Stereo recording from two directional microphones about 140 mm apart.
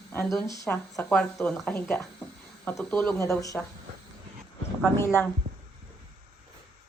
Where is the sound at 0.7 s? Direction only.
5° left (ahead or behind).